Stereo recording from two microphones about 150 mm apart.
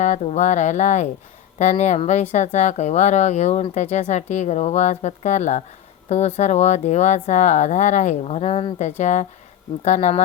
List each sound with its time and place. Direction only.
0.0 s speech: 50° left (ahead or behind)